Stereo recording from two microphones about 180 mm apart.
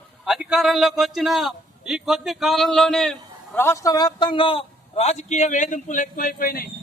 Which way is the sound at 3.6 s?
15° left (ahead or behind).